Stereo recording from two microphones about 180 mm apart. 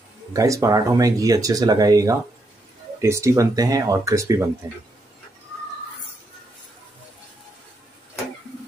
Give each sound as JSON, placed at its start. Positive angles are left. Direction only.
{"t": 0.3, "sound": "speech", "side_deg": -20}